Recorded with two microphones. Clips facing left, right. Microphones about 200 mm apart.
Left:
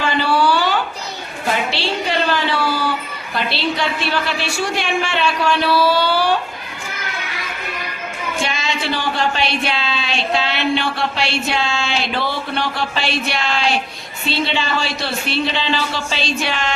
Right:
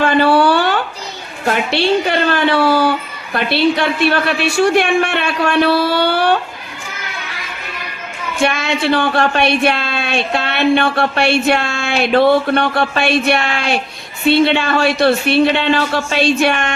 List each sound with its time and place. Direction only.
0.0 s a sound: 55° right (ahead or behind)
1.5 s speech: 60° right (ahead or behind)
8.4 s speech: 60° right (ahead or behind)